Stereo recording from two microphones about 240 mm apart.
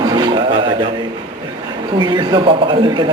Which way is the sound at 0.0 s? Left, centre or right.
Centre.